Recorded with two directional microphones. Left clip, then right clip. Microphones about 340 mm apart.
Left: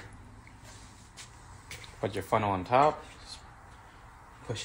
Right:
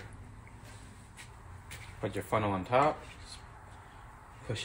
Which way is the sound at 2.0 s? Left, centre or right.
Left.